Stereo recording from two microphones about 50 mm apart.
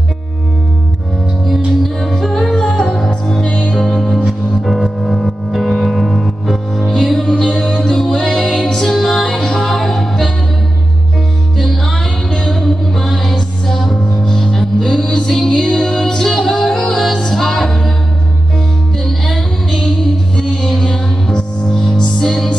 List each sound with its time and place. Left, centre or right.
1.8 s music: centre
2.6 s music: centre
4.3 s music: centre
11.5 s music: centre
19.0 s music: centre